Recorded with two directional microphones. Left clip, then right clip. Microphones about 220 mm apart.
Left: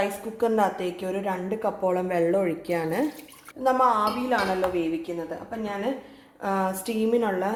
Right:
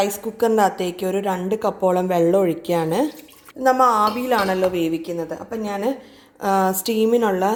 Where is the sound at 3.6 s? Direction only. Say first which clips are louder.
Right 6 dB; 45° right (ahead or behind).